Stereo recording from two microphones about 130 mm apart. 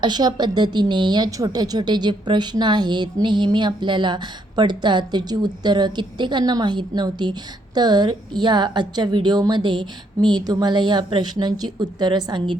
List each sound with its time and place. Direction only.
0.0 s a woman's voice: 30° right (ahead or behind)